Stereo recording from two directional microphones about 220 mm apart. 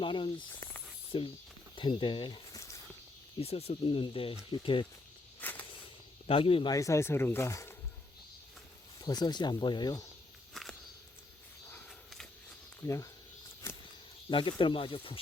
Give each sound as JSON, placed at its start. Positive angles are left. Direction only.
{"t": 0.0, "sound": "speech", "side_deg": 20}
{"t": 0.5, "sound": "a sound", "side_deg": 10}
{"t": 1.1, "sound": "speech", "side_deg": 25}
{"t": 3.4, "sound": "speech", "side_deg": 25}
{"t": 5.4, "sound": "a sound", "side_deg": 10}
{"t": 6.2, "sound": "speech", "side_deg": 25}
{"t": 9.0, "sound": "speech", "side_deg": 20}
{"t": 10.5, "sound": "walk", "side_deg": 0}
{"t": 11.7, "sound": "a sound", "side_deg": 5}
{"t": 12.8, "sound": "speech", "side_deg": 15}
{"t": 13.6, "sound": "a sound", "side_deg": 10}
{"t": 14.3, "sound": "speech", "side_deg": 20}